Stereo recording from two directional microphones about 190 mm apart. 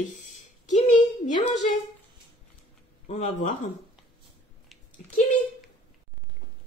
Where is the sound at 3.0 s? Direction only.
40° left (ahead or behind).